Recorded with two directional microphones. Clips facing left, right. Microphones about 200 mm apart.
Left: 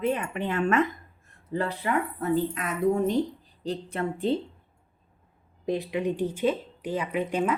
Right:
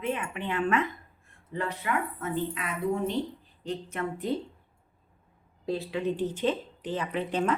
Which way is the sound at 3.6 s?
35° left (ahead or behind).